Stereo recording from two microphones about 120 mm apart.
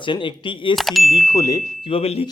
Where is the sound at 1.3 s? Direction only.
30° left (ahead or behind).